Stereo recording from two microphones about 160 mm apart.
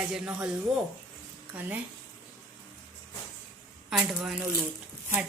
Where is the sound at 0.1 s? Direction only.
5° right (ahead or behind).